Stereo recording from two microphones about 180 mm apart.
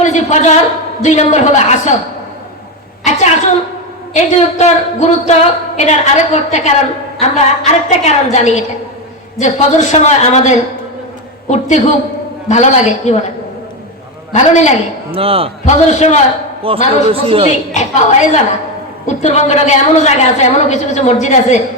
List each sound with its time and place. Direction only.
0.0 s a woman's voice: 40° left (ahead or behind)
3.0 s a sound: 40° left (ahead or behind)
4.1 s a woman's voice: 40° left (ahead or behind)
14.3 s a woman's voice: 40° left (ahead or behind)
15.1 s speech: 30° right (ahead or behind)
15.6 s a woman's voice: 40° left (ahead or behind)
16.6 s speech: 30° right (ahead or behind)
17.7 s a woman's voice: 40° left (ahead or behind)